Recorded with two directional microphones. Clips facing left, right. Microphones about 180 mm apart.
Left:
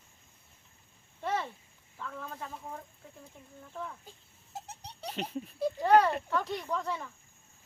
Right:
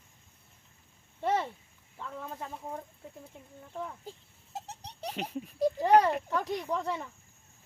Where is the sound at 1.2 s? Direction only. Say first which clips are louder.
Right 4 dB; 25° right (ahead or behind).